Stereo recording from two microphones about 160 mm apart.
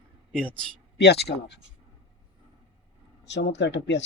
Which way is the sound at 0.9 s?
90° left.